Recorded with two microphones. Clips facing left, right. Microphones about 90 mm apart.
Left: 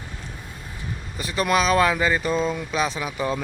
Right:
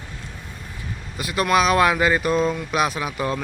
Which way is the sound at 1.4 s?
5° right (ahead or behind).